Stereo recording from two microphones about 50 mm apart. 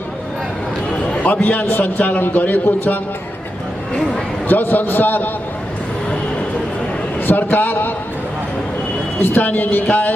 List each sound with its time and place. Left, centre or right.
1.2 s a man's voice: left
4.5 s a man's voice: left
7.2 s a man's voice: left
9.2 s a man's voice: left